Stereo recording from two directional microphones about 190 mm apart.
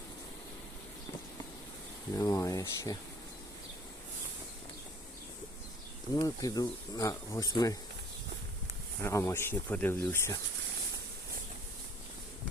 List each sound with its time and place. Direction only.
2.1 s speech: 15° left (ahead or behind)
6.1 s speech: 20° left (ahead or behind)
9.0 s speech: 15° left (ahead or behind)